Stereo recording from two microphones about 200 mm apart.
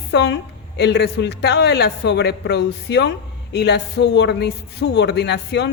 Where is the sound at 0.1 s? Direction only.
60° left (ahead or behind).